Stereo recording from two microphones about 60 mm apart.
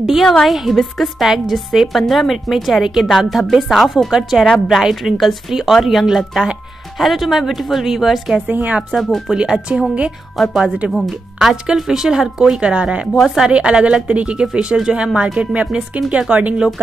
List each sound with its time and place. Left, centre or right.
0.0 s a woman's voice: centre
8.5 s speech: right
8.9 s a woman's voice: centre
9.4 s speech: centre
10.3 s a woman's voice: centre; by 13.1 s right
13.1 s a woman's voice: centre
13.5 s speech: centre